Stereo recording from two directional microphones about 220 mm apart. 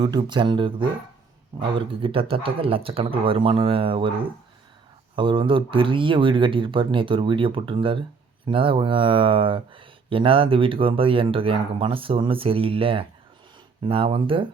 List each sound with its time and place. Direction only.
0.0 s speech: 20° right (ahead or behind)
5.1 s speech: 20° right (ahead or behind)